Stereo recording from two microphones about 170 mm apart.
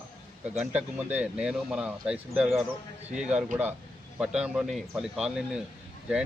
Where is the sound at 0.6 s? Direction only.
10° right (ahead or behind).